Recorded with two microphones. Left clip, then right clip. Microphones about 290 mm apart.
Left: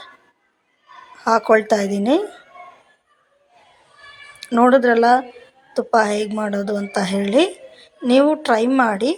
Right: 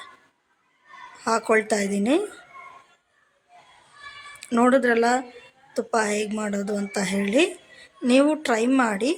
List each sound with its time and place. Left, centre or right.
1.2 s a woman's voice: centre
4.4 s a woman's voice: centre